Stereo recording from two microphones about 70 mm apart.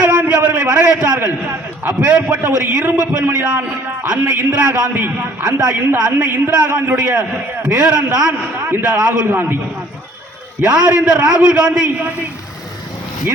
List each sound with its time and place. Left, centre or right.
0.0 s a sound: centre
2.0 s a man's voice: centre
4.2 s a man's voice: right
6.5 s a man's voice: centre
8.6 s a man's voice: right
9.2 s a man's voice: right
10.6 s a man's voice: centre